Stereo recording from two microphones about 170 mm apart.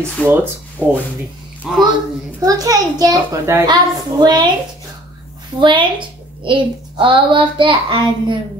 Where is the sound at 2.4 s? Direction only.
20° right (ahead or behind).